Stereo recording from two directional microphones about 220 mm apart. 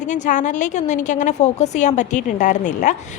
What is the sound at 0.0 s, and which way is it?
A woman's voice, 35° left (ahead or behind).